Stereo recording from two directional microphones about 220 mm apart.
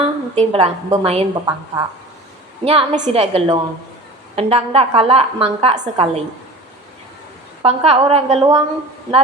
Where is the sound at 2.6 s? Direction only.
25° right (ahead or behind).